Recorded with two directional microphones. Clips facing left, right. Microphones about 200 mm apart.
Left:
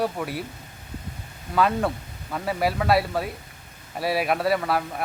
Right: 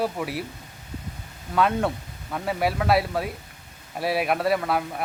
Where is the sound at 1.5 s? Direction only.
Centre (ahead or behind).